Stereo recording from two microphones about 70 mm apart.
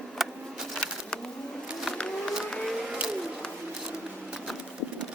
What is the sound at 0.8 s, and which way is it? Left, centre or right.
Bird, centre.